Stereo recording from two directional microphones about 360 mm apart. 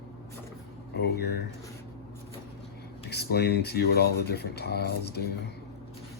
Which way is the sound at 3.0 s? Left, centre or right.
Left.